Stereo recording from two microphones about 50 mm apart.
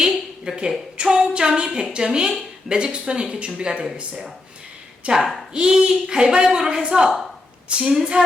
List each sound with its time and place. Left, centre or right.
0.0 s a sound: centre
1.3 s speech: centre
5.0 s speech: centre